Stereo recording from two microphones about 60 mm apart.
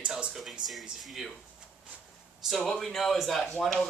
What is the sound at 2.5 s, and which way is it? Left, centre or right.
Speech, centre.